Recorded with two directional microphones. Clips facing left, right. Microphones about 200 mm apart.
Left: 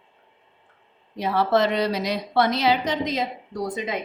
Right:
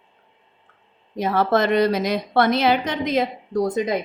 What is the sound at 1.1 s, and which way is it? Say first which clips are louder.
A woman's voice: right 1 dB; 45° right (ahead or behind).